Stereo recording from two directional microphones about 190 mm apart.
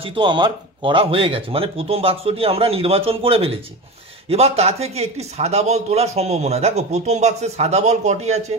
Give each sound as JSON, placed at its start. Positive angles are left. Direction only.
{"t": 0.0, "sound": "a man's voice", "side_deg": -25}